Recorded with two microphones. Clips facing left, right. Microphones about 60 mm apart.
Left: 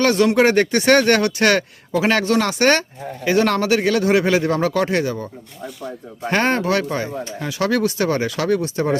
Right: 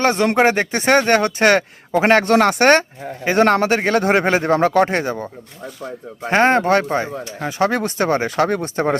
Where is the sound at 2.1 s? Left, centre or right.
Right.